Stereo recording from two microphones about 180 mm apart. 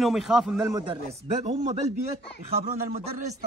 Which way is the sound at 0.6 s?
20° right (ahead or behind).